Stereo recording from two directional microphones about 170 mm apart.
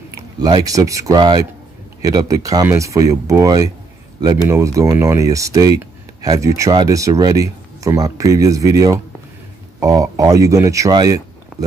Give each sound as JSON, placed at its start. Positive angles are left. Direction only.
{"t": 0.1, "sound": "speech", "side_deg": -25}